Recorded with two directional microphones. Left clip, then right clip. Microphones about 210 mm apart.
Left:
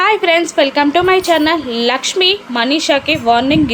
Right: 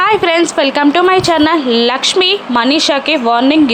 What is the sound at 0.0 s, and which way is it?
Speech, 15° right (ahead or behind).